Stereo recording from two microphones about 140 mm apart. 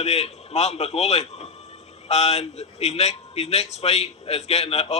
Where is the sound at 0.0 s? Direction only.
50° left (ahead or behind).